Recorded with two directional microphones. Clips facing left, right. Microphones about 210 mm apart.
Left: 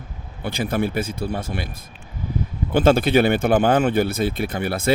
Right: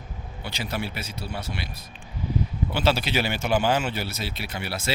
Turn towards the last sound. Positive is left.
turn(degrees=50)  # may be behind; listen again after turning